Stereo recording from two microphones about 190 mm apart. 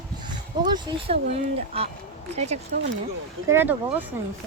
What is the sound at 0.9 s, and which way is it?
Speech, 30° right (ahead or behind).